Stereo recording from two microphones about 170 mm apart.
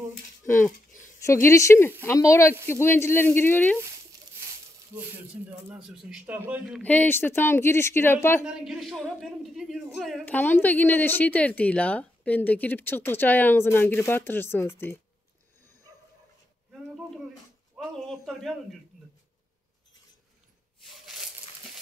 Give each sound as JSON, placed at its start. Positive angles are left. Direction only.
{"t": 0.5, "sound": "a woman's voice", "side_deg": 15}
{"t": 4.9, "sound": "speech", "side_deg": -10}
{"t": 6.8, "sound": "a woman's voice", "side_deg": 10}
{"t": 8.5, "sound": "a woman's voice", "side_deg": -5}
{"t": 10.2, "sound": "a woman's voice", "side_deg": 10}
{"t": 17.9, "sound": "a man's voice", "side_deg": 0}
{"t": 20.8, "sound": "a sound", "side_deg": 0}